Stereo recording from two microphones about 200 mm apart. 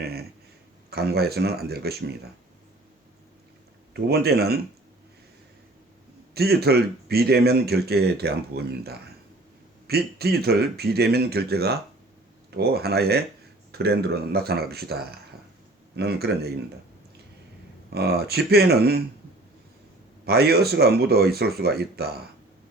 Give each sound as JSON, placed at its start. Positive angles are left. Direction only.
{"t": 0.0, "sound": "speech", "side_deg": -50}
{"t": 3.9, "sound": "speech", "side_deg": -50}
{"t": 6.3, "sound": "speech", "side_deg": -50}
{"t": 17.9, "sound": "speech", "side_deg": -55}
{"t": 20.2, "sound": "speech", "side_deg": -55}